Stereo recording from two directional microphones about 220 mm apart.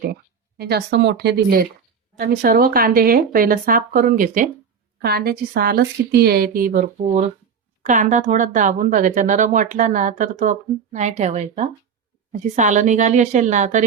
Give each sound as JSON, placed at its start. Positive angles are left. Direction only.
{"t": 0.0, "sound": "a woman's voice", "side_deg": -45}